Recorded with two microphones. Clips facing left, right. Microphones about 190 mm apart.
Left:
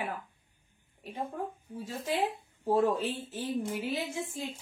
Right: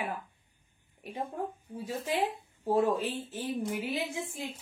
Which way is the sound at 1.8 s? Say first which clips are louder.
Right 1 dB; 10° right (ahead or behind).